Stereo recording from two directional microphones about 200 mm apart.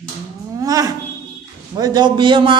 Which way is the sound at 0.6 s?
15° right (ahead or behind).